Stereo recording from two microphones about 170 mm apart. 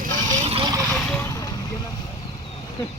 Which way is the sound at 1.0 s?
5° left (ahead or behind).